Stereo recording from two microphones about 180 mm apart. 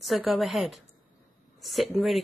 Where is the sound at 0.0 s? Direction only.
Centre (ahead or behind).